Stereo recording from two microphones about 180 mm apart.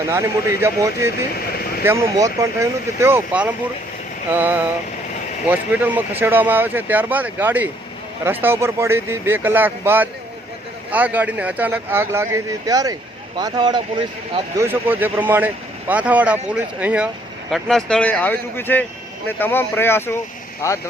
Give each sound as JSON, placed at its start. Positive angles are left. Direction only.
{"t": 0.1, "sound": "speech", "side_deg": -15}
{"t": 1.4, "sound": "a sound", "side_deg": 55}
{"t": 1.8, "sound": "speech", "side_deg": -15}
{"t": 14.6, "sound": "speech", "side_deg": -10}